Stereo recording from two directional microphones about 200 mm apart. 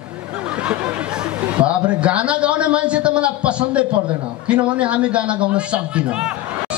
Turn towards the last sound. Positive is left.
turn(degrees=-5)  # may be behind; listen again after turning